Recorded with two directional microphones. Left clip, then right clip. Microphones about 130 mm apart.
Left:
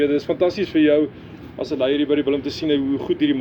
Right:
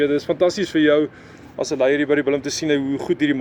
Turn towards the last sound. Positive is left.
turn(degrees=-30)  # may be behind; listen again after turning